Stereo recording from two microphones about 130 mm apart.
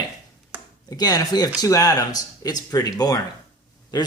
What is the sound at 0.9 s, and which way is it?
Speech, 30° left (ahead or behind).